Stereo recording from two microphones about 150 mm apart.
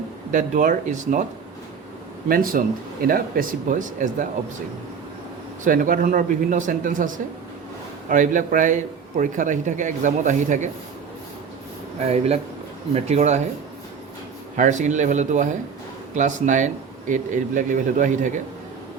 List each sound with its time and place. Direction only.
0.3 s a man's voice: 60° right (ahead or behind)
2.3 s speech: 70° right (ahead or behind)
5.6 s a man's voice: 65° right (ahead or behind)
8.1 s a man's voice: 60° right (ahead or behind)
11.9 s speech: 45° right (ahead or behind)
14.5 s a man's voice: 55° right (ahead or behind)